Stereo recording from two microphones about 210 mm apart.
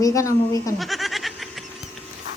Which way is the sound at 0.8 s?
Centre (ahead or behind).